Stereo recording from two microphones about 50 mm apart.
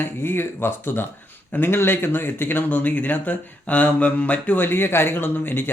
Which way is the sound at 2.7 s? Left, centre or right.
Left.